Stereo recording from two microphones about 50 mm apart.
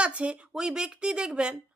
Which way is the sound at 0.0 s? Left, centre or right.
Right.